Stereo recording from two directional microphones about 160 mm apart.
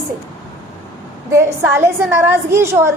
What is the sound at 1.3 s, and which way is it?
A woman's voice, 20° right (ahead or behind).